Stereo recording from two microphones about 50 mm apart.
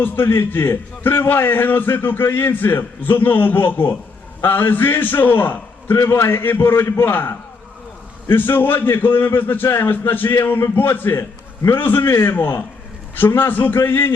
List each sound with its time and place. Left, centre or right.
0.0 s a man's voice: left
6.7 s a man's voice: left
7.0 s a man's voice: left
8.5 s a man's voice: left
11.2 s a man's voice: left
11.8 s a man's voice: left